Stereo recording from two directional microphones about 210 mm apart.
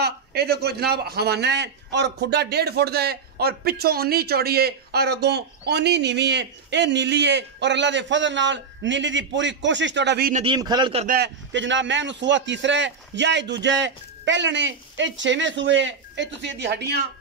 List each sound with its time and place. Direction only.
0.0 s a man's voice: 50° right (ahead or behind)
10.3 s a man's voice: 25° right (ahead or behind)
11.1 s a man's voice: 50° right (ahead or behind)